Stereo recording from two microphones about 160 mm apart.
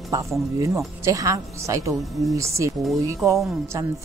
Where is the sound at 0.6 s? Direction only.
20° right (ahead or behind).